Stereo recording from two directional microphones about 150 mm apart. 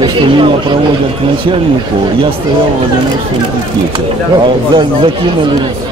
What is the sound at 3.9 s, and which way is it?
Speech, 30° right (ahead or behind).